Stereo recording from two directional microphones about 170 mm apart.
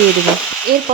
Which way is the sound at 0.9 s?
45° right (ahead or behind).